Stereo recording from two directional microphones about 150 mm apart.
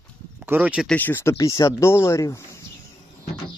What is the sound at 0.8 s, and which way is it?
Speech, 10° left (ahead or behind).